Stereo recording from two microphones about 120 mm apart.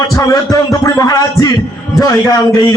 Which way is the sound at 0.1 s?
30° left (ahead or behind).